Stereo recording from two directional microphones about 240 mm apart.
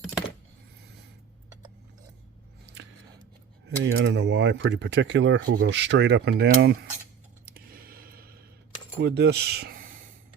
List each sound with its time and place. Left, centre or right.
3.8 s speech: right
7.4 s a sound: right
9.0 s speech: right